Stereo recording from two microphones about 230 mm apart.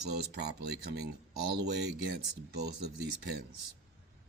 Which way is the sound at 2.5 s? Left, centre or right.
Right.